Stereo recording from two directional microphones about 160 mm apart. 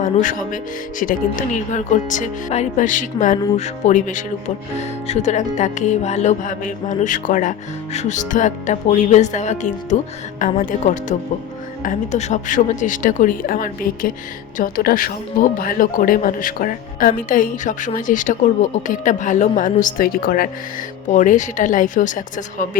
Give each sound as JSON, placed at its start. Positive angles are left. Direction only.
{"t": 0.0, "sound": "speech", "side_deg": 55}
{"t": 21.1, "sound": "speech", "side_deg": 50}